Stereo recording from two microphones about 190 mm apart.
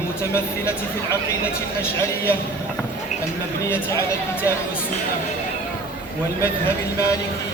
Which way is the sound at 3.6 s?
15° left (ahead or behind).